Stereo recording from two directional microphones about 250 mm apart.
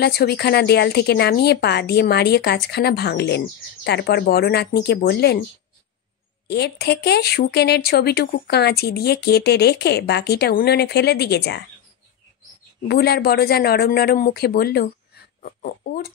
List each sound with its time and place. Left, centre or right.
0.0 s speech: left
6.4 s speech: left
12.8 s speech: left